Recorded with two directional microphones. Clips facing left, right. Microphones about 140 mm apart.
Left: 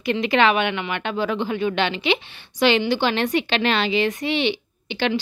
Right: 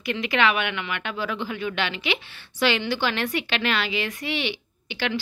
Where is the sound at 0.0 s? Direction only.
30° left (ahead or behind).